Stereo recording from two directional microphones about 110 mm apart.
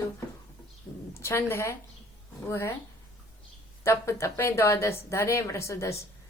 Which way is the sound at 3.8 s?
25° left (ahead or behind).